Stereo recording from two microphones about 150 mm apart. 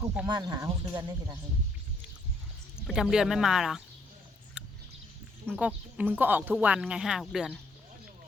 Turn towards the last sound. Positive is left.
turn(degrees=0)  # may be behind; listen again after turning